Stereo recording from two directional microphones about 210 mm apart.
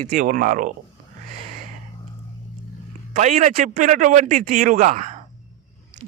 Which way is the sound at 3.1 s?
35° right (ahead or behind).